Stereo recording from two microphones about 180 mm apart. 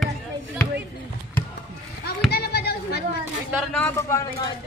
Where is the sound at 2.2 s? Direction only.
60° left (ahead or behind).